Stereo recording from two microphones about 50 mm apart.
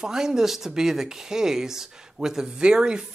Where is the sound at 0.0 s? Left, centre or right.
Centre.